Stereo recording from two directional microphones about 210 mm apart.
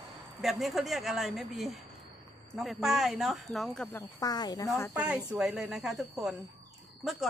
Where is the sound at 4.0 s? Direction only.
15° left (ahead or behind).